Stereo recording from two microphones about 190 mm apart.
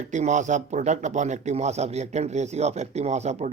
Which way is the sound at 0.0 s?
40° right (ahead or behind).